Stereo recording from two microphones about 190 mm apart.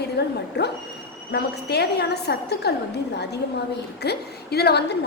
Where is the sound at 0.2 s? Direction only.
60° left (ahead or behind).